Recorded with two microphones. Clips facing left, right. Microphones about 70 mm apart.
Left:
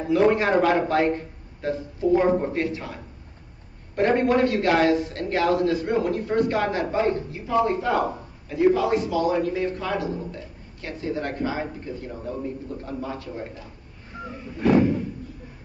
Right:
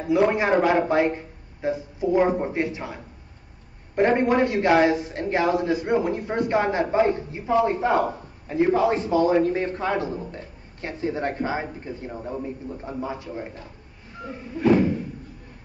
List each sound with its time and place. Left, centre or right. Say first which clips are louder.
0.1 s a man's voice: even; centre
14.6 s thump: even; centre